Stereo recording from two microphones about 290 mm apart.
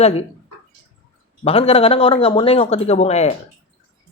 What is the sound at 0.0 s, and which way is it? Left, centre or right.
Speech, left.